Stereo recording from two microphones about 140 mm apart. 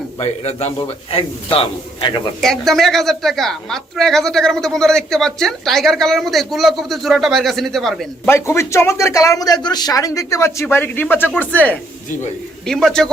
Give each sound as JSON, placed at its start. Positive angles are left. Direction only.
{"t": 0.2, "sound": "a man's voice", "side_deg": 50}
{"t": 2.4, "sound": "a woman's voice", "side_deg": 0}
{"t": 8.3, "sound": "a woman's voice", "side_deg": 20}